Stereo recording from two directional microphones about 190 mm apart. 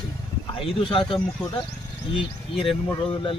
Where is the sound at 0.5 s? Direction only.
30° left (ahead or behind).